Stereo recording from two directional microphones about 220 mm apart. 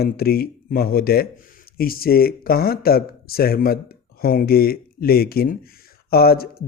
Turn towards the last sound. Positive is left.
turn(degrees=45)  # may be behind; listen again after turning